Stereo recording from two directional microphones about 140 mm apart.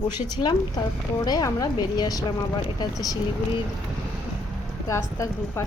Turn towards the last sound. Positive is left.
turn(degrees=20)  # may be behind; listen again after turning